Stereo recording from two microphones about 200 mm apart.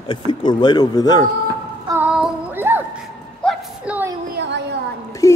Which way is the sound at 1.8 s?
10° right (ahead or behind).